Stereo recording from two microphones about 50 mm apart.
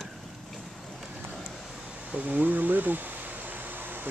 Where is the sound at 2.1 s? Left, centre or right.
Right.